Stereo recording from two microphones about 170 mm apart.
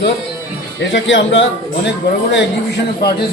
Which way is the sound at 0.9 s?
90° left.